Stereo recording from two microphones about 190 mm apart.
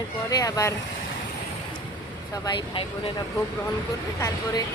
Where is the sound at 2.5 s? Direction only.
25° left (ahead or behind).